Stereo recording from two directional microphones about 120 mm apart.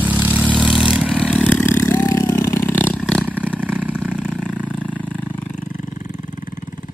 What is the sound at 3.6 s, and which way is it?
Vehicle, 10° right (ahead or behind).